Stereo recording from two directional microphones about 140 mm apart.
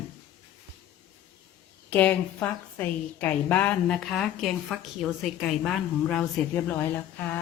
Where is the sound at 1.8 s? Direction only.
10° left (ahead or behind).